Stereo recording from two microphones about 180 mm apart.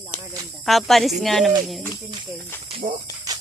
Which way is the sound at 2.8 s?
40° right (ahead or behind).